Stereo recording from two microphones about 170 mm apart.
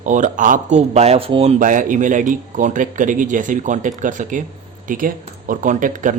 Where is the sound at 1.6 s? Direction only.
50° right (ahead or behind).